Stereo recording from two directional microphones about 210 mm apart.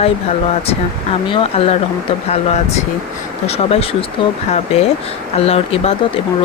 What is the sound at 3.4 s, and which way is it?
Speech, 30° left (ahead or behind).